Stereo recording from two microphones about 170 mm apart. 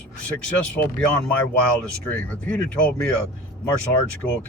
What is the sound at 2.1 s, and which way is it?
Speech, 10° left (ahead or behind).